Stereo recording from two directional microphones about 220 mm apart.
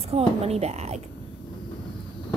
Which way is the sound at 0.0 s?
25° right (ahead or behind).